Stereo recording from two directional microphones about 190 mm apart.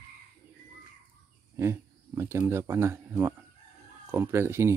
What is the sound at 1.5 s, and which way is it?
Speech, 15° right (ahead or behind).